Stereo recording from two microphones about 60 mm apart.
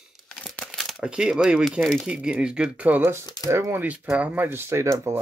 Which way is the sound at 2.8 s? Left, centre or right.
Right.